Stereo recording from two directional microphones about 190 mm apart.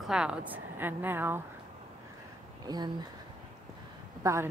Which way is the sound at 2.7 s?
20° right (ahead or behind).